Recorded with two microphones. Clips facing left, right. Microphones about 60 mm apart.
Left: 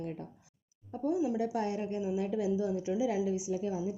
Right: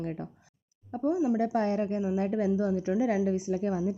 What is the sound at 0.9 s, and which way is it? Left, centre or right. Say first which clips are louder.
Speech: right 4 dB; right.